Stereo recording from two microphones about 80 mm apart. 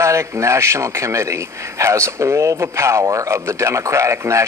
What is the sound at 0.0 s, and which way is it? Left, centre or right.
A man's voice, right.